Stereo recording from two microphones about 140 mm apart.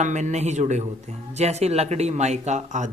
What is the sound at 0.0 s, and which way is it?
A man's voice, 60° right (ahead or behind).